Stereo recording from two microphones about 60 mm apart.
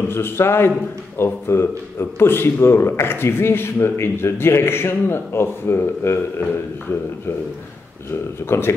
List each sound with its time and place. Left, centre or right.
0.1 s a man's voice: left
8.1 s a man's voice: left